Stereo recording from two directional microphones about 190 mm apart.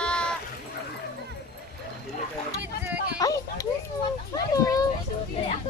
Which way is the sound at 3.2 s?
20° left (ahead or behind).